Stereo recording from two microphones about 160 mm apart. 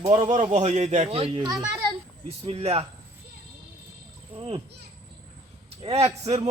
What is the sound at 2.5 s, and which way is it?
Speech, 40° right (ahead or behind).